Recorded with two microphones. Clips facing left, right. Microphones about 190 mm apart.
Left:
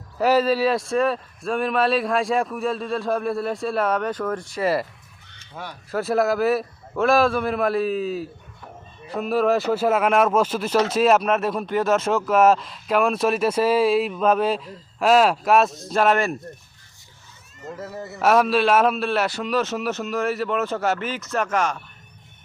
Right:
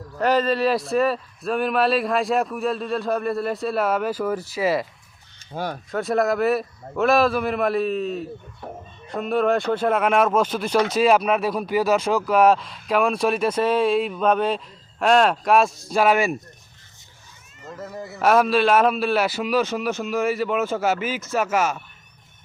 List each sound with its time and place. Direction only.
0.2 s speech: 5° left (ahead or behind)
5.5 s speech: 30° right (ahead or behind)
5.9 s speech: centre (ahead or behind)
17.7 s speech: 5° left (ahead or behind)